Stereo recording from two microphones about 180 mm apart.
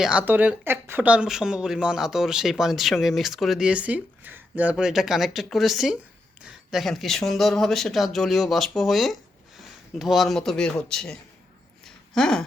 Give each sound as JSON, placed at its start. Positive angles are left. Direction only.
{"t": 0.0, "sound": "speech", "side_deg": -5}